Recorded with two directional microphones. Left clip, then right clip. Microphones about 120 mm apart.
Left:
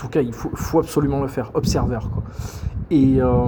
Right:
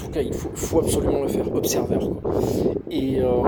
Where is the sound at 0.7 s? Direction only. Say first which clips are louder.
Left 1 dB; 15° right (ahead or behind).